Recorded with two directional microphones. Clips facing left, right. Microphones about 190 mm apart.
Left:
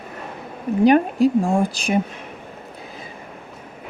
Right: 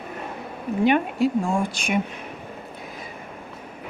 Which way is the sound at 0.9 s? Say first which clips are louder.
Left 5 dB; 40° left (ahead or behind).